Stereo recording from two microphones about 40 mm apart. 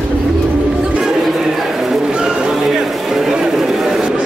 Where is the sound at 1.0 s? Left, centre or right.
Centre.